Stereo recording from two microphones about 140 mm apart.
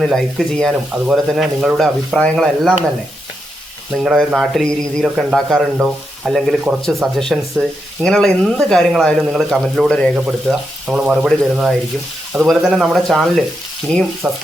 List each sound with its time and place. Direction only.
0.0 s speech: centre (ahead or behind)
3.9 s speech: 5° right (ahead or behind)